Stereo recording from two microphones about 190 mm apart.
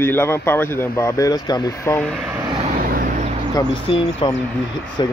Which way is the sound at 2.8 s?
50° right (ahead or behind).